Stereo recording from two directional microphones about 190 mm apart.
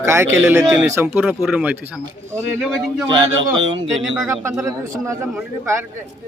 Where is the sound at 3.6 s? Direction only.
75° right (ahead or behind).